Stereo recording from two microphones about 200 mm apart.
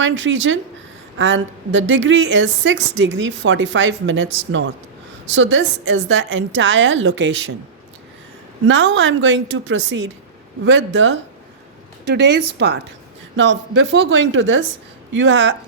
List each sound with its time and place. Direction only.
0.0 s a woman's voice: 70° right (ahead or behind)
8.6 s a woman's voice: 65° right (ahead or behind)
13.3 s a woman's voice: 70° right (ahead or behind)